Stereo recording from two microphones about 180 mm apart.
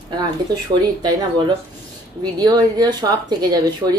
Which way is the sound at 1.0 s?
25° right (ahead or behind).